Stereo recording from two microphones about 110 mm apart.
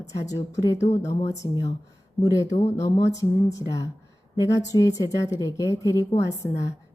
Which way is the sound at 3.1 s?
30° left (ahead or behind).